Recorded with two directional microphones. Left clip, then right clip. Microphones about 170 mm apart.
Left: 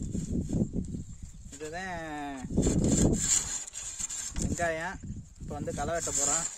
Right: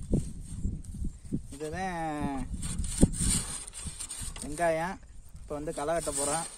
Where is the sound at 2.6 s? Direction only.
Centre (ahead or behind).